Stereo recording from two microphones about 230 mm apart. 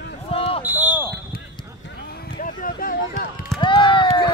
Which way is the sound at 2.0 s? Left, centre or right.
Left.